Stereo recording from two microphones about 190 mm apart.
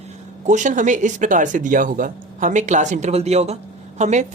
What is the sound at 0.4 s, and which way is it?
Speech, 40° right (ahead or behind).